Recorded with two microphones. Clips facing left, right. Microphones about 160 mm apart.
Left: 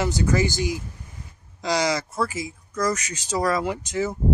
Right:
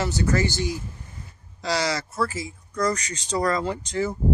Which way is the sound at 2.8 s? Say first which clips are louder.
Even; 5° left (ahead or behind).